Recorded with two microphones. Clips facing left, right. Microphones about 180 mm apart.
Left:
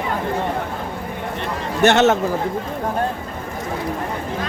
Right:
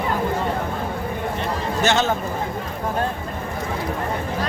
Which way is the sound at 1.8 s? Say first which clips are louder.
Left 7 dB; 65° left (ahead or behind).